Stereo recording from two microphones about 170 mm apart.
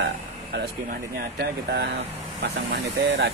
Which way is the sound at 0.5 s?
70° right (ahead or behind).